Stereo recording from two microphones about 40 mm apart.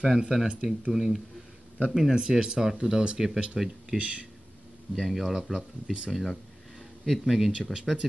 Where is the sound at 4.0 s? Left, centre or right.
Right.